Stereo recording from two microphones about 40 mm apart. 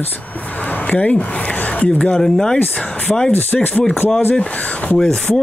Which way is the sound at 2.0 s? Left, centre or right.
Left.